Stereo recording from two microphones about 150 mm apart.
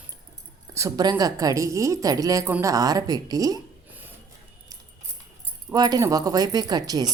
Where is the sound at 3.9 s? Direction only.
10° right (ahead or behind).